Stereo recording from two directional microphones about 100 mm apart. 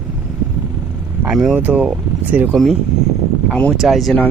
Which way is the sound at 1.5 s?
15° right (ahead or behind).